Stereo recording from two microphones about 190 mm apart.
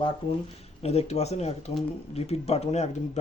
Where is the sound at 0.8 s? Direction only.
35° left (ahead or behind).